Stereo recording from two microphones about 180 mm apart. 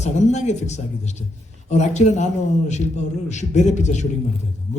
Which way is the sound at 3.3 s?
40° left (ahead or behind).